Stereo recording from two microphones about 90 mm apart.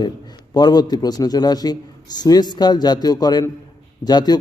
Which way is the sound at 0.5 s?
50° left (ahead or behind).